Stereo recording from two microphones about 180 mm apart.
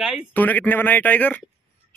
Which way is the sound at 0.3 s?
10° left (ahead or behind).